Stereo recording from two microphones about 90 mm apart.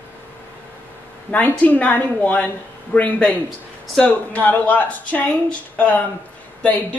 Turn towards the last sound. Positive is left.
turn(degrees=15)  # may be behind; listen again after turning